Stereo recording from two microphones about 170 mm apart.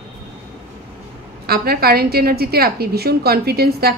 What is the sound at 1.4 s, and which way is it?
A woman's voice, 65° right (ahead or behind).